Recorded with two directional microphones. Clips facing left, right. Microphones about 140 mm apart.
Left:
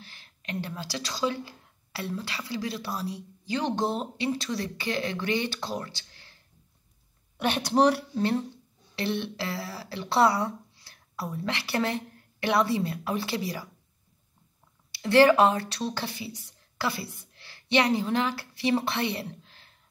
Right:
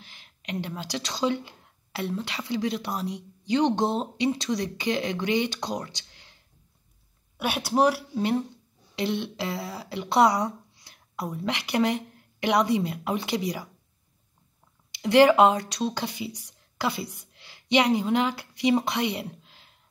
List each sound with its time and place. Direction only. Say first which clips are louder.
0.0 s a woman's voice: right 1 dB; 15° right (ahead or behind)
7.3 s speech: even; 5° right (ahead or behind)
8.2 s speech: right 1 dB; 15° right (ahead or behind)
14.9 s speech: right 1 dB; 15° right (ahead or behind)